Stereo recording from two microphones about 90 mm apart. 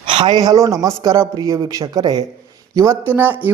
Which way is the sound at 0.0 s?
65° right (ahead or behind).